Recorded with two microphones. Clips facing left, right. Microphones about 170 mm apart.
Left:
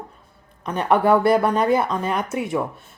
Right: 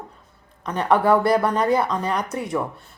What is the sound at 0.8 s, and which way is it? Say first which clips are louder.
Speech: left 1 dB; 25° left (ahead or behind).